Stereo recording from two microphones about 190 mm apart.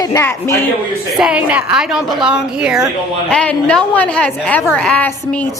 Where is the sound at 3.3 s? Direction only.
5° left (ahead or behind).